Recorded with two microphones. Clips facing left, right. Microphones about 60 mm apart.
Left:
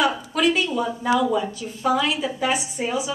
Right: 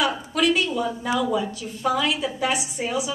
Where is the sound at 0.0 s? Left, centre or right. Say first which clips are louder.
Left 2 dB; centre.